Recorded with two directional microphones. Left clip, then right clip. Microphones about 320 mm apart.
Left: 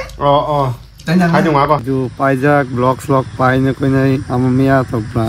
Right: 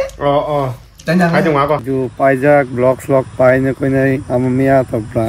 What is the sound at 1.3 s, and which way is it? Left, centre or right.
Speech, left.